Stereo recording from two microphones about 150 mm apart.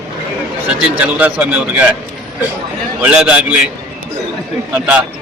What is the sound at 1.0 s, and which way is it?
Speech, 10° right (ahead or behind).